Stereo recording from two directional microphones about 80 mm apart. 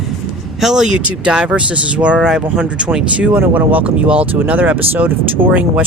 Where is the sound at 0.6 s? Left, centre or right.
Centre.